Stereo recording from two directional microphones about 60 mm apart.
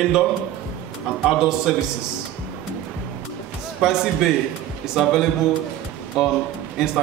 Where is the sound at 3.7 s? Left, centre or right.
Centre.